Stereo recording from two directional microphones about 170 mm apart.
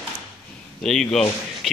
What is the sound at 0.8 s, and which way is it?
Speech, centre (ahead or behind).